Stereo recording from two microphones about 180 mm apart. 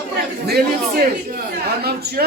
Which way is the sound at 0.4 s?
60° right (ahead or behind).